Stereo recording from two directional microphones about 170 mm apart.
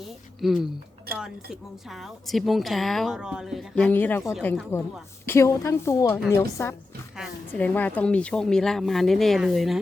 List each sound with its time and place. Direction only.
0.4 s speech: centre (ahead or behind)
1.9 s speech: centre (ahead or behind)
3.8 s a woman's voice: 10° left (ahead or behind)
4.2 s speech: centre (ahead or behind)
4.7 s a woman's voice: 15° left (ahead or behind); by 9.7 s centre (ahead or behind)